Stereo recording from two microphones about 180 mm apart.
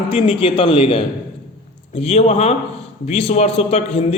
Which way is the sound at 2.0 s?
35° left (ahead or behind).